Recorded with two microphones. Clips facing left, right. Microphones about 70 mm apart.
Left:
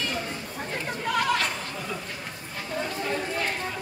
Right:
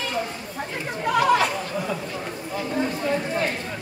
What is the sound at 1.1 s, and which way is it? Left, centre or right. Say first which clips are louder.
Chatter: right 7 dB; centre.